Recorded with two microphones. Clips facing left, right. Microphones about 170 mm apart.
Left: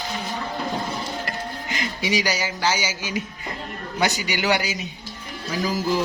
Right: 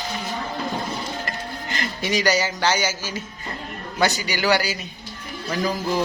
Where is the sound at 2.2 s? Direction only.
10° left (ahead or behind).